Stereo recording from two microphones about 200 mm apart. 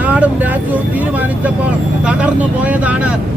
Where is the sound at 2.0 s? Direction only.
5° right (ahead or behind).